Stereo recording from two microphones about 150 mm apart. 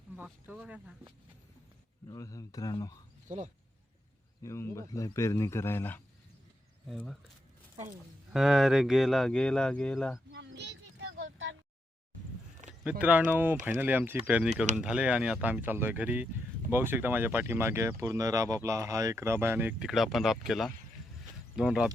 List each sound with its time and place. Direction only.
0.2 s speech: 10° right (ahead or behind)
2.0 s a man's voice: 20° left (ahead or behind)
3.2 s speech: 55° right (ahead or behind)
4.4 s a man's voice: 20° left (ahead or behind)
6.8 s speech: centre (ahead or behind)
8.3 s speech: centre (ahead or behind)
12.8 s speech: 10° right (ahead or behind)
19.9 s speech: centre (ahead or behind)